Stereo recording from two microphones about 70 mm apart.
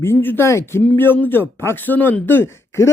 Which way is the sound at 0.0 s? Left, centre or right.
Left.